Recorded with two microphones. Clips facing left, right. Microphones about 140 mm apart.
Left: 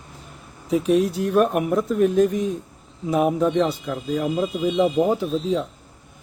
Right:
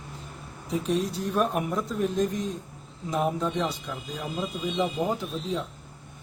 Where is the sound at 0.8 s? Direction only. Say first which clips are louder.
Left 8 dB; 65° left (ahead or behind).